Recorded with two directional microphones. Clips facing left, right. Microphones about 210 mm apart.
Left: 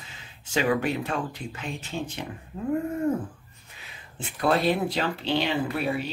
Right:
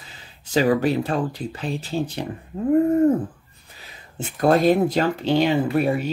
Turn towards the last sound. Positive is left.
turn(degrees=-45)  # may be behind; listen again after turning